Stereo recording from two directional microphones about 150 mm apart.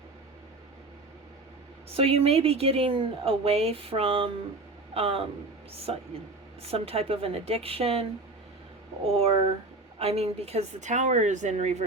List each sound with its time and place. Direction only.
2.0 s a woman's voice: 40° right (ahead or behind)
9.0 s a woman's voice: 40° right (ahead or behind)